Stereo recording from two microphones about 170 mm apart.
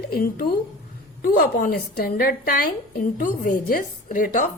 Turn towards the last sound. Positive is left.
turn(degrees=55)  # may be behind; listen again after turning